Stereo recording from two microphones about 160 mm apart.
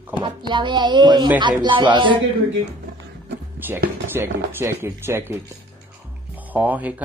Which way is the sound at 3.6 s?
10° right (ahead or behind).